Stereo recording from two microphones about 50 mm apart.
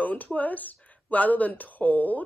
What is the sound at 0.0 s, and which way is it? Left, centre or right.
Speech, left.